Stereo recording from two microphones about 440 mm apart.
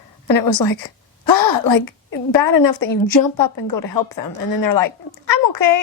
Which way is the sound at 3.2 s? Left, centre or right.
Left.